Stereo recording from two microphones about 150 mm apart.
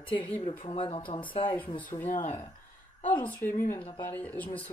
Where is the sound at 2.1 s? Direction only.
50° left (ahead or behind).